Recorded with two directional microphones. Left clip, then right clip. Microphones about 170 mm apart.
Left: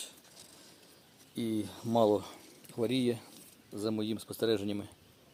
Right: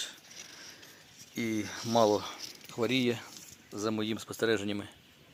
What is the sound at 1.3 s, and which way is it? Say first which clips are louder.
Speech: right 2 dB; 5° left (ahead or behind).